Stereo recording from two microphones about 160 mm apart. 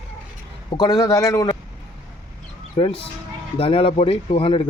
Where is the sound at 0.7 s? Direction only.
25° left (ahead or behind).